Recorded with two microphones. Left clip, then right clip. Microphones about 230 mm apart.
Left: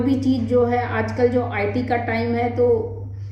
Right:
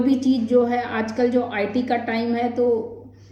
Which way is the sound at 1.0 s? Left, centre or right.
Centre.